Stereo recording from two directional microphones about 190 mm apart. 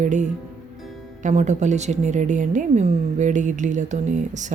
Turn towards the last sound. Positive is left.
turn(degrees=-40)  # may be behind; listen again after turning